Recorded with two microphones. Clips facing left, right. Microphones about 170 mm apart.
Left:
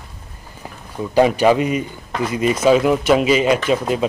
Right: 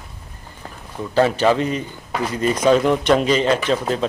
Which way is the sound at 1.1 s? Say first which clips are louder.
Left 3 dB; 15° left (ahead or behind).